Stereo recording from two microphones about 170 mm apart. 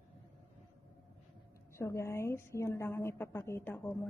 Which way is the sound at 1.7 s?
15° left (ahead or behind).